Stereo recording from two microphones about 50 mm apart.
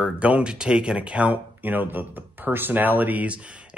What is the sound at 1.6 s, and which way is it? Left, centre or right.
A man's voice, right.